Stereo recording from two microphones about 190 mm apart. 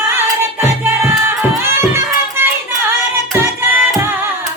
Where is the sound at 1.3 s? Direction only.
15° right (ahead or behind).